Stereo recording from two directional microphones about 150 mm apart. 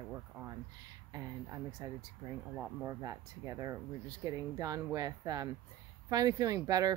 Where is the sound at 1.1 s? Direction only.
25° right (ahead or behind).